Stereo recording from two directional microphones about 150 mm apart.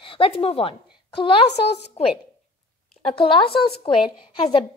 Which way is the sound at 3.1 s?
35° left (ahead or behind).